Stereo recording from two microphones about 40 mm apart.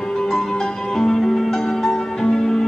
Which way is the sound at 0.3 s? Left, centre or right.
Centre.